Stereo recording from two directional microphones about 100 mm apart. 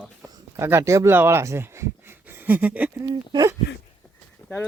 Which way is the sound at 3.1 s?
45° right (ahead or behind).